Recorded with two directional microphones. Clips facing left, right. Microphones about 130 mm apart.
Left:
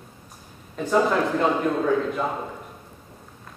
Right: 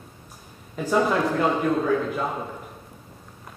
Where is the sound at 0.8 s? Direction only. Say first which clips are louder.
Left 1 dB; centre (ahead or behind).